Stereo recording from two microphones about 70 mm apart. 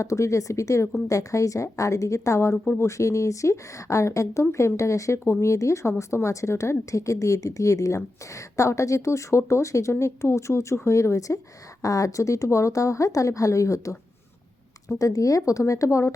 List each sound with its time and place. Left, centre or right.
0.0 s a woman's voice: left
14.9 s a woman's voice: left